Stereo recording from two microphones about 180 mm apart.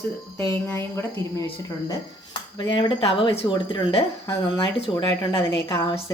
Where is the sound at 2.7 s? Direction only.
30° left (ahead or behind).